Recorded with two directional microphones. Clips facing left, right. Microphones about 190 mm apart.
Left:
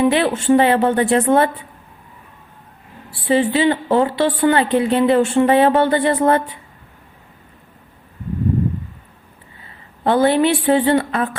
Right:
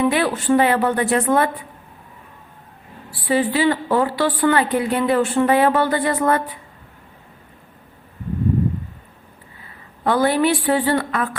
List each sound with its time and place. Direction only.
0.0 s a woman's voice: 25° left (ahead or behind)
3.1 s a woman's voice: 25° left (ahead or behind)
9.6 s a woman's voice: 25° left (ahead or behind)